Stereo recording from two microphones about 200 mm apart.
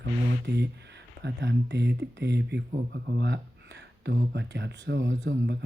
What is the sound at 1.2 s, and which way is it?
Speech, 60° right (ahead or behind).